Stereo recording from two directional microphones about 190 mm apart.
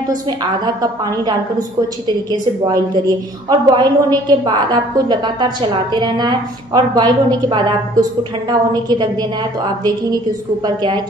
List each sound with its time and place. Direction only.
3.4 s a woman's voice: 20° right (ahead or behind)